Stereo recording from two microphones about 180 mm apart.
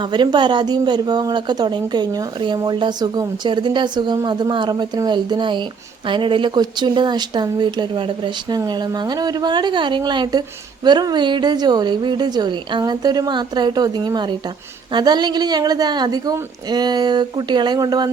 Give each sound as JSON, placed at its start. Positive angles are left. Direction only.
{"t": 0.0, "sound": "speech", "side_deg": -25}